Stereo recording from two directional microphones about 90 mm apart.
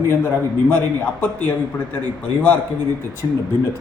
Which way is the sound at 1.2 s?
20° left (ahead or behind).